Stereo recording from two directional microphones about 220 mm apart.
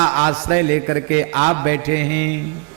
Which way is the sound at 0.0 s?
20° right (ahead or behind).